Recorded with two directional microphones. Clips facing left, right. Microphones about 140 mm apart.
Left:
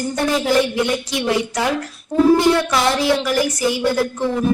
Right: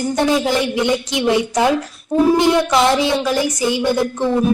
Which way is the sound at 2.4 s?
20° right (ahead or behind).